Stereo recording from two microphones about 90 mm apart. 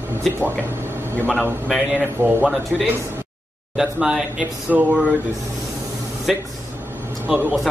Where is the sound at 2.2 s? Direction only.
20° right (ahead or behind).